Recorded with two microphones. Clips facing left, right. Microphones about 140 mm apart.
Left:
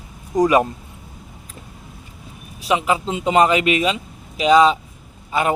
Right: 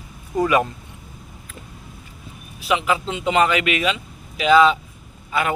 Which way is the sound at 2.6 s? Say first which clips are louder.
Left 2 dB; 35° left (ahead or behind).